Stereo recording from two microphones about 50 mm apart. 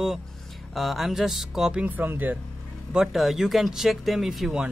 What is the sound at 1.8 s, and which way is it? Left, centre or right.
Speech, right.